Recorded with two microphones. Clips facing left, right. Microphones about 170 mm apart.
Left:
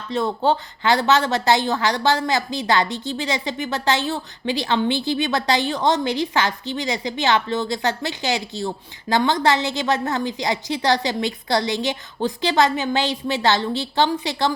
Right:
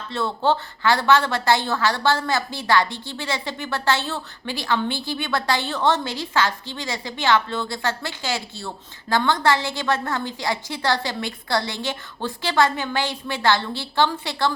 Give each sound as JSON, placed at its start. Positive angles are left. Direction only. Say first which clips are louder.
{"t": 0.1, "sound": "a woman's voice", "louder": "left 2 dB", "side_deg": 15}